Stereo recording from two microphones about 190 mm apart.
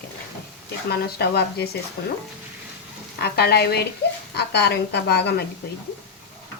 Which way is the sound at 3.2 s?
55° left (ahead or behind).